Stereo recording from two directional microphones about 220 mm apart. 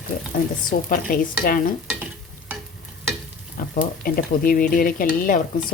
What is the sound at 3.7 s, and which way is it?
A woman's voice, 40° left (ahead or behind).